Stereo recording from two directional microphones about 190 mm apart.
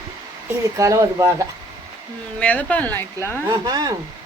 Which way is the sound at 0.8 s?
15° right (ahead or behind).